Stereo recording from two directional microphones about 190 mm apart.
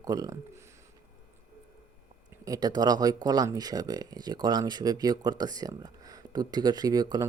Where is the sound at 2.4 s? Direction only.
20° right (ahead or behind).